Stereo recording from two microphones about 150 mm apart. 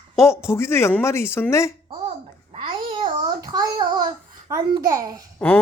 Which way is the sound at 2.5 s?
35° right (ahead or behind).